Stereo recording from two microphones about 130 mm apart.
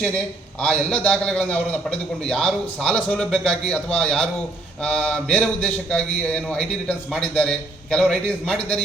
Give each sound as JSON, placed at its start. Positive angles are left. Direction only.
{"t": 0.6, "sound": "a man's voice", "side_deg": 5}